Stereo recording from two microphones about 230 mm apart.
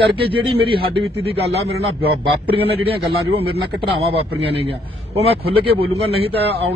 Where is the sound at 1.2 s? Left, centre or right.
Right.